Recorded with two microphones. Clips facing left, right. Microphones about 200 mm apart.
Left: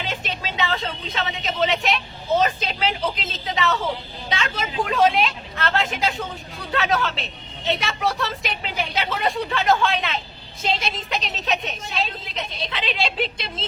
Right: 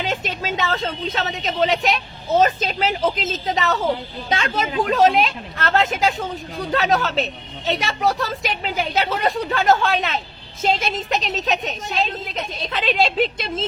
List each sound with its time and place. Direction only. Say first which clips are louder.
0.0 s a woman's voice: right 4 dB; 45° right (ahead or behind)